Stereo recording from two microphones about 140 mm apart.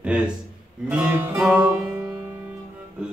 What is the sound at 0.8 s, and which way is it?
Music, 10° right (ahead or behind).